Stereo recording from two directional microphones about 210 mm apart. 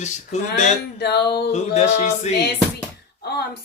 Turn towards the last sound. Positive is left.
turn(degrees=50)  # may be behind; listen again after turning